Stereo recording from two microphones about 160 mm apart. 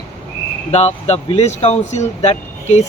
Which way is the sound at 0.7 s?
40° left (ahead or behind).